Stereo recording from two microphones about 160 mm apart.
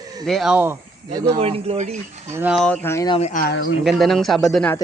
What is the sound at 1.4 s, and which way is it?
Speech, 40° right (ahead or behind).